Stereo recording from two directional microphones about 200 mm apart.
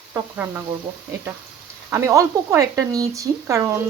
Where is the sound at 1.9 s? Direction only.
15° right (ahead or behind).